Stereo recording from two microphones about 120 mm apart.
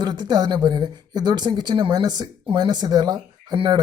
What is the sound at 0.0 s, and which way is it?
Speech, 35° right (ahead or behind).